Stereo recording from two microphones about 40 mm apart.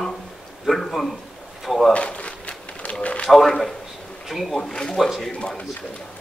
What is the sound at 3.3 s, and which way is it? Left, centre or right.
Speech, centre.